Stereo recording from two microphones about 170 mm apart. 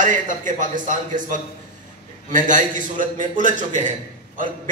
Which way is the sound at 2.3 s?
50° right (ahead or behind).